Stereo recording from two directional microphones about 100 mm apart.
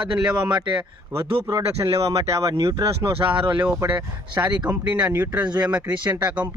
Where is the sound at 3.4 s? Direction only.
55° right (ahead or behind).